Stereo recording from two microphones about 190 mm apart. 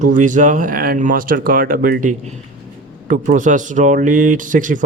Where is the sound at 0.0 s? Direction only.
40° right (ahead or behind).